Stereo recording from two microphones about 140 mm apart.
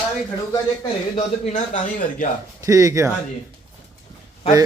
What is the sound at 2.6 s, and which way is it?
Speech, 25° right (ahead or behind).